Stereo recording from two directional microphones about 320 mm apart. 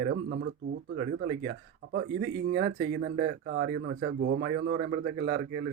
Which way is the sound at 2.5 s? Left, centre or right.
Right.